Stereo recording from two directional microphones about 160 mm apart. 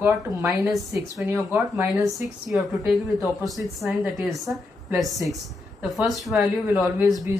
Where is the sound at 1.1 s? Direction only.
15° right (ahead or behind).